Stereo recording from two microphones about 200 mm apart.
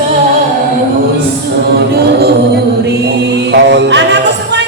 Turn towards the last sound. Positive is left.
turn(degrees=-60)  # may be behind; listen again after turning